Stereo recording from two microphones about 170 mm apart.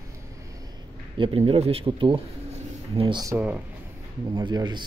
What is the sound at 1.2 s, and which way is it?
Speech, 35° right (ahead or behind).